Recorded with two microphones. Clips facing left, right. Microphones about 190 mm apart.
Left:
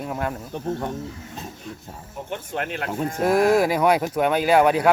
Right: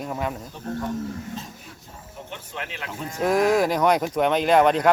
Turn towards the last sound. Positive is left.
turn(degrees=10)  # may be behind; listen again after turning